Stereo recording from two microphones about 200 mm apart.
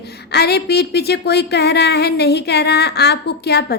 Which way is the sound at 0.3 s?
55° left (ahead or behind).